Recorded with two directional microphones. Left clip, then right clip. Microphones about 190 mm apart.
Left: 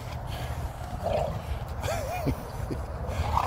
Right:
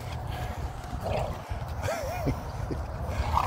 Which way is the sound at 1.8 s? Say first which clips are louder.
Even; 10° left (ahead or behind).